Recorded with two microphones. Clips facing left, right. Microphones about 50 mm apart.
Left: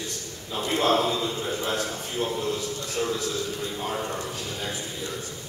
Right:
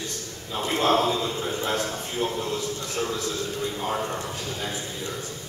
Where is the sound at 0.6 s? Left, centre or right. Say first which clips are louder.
Right 1 dB; right.